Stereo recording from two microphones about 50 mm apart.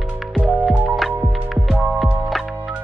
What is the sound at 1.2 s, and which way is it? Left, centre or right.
Music, right.